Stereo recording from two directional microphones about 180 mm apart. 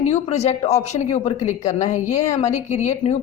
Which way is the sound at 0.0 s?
40° left (ahead or behind).